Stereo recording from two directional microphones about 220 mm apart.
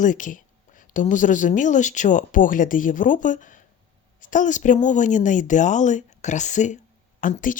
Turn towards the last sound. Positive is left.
turn(degrees=35)  # may be behind; listen again after turning